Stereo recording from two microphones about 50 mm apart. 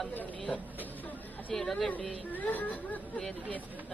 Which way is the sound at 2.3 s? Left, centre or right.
Left.